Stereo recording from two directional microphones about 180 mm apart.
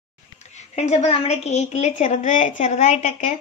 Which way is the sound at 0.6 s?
40° left (ahead or behind).